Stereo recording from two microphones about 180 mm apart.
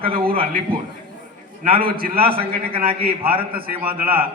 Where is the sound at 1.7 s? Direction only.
55° right (ahead or behind).